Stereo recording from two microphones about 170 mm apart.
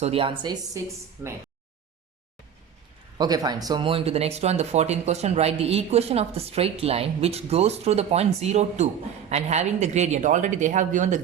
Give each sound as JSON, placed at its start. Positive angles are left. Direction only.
{"t": 0.0, "sound": "speech", "side_deg": -35}
{"t": 0.8, "sound": "speech", "side_deg": -20}
{"t": 3.2, "sound": "speech", "side_deg": -25}